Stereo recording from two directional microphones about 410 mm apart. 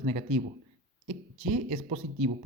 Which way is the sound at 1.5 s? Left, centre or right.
Centre.